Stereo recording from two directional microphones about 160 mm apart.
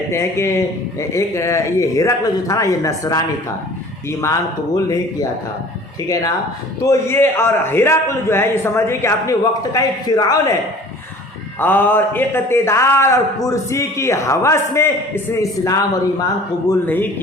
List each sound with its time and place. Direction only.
0.1 s a man's voice: 15° left (ahead or behind)
6.8 s a man's voice: 15° left (ahead or behind)
11.6 s a man's voice: 10° left (ahead or behind)